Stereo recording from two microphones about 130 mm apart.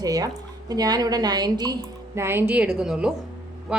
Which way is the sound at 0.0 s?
30° right (ahead or behind).